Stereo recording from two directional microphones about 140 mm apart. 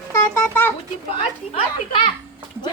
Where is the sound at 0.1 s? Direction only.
15° left (ahead or behind).